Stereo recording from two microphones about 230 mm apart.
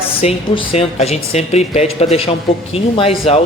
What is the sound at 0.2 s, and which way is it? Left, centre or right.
A man's voice, left.